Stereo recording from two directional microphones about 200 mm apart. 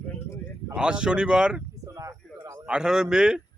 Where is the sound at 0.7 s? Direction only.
5° right (ahead or behind).